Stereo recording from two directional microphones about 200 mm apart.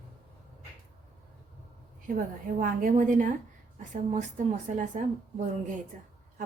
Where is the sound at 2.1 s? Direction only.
45° right (ahead or behind).